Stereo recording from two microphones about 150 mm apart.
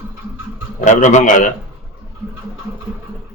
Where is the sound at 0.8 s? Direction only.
55° left (ahead or behind).